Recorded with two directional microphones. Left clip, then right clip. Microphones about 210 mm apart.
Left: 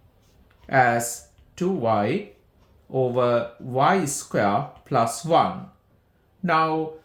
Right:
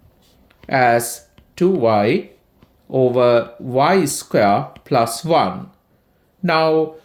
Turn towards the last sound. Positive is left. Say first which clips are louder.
# right 5 dB
turn(degrees=-40)  # may be behind; listen again after turning